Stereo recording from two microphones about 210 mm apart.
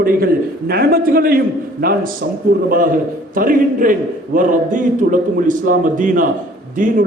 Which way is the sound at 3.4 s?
40° right (ahead or behind).